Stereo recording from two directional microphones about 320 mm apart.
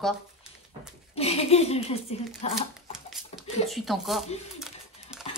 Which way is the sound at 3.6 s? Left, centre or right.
Centre.